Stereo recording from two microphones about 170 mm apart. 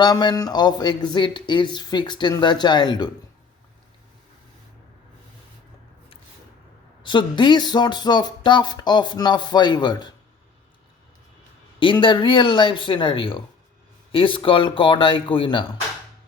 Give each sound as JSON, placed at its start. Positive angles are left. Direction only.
{"t": 0.0, "sound": "speech", "side_deg": 25}
{"t": 7.0, "sound": "speech", "side_deg": 25}
{"t": 11.8, "sound": "speech", "side_deg": 30}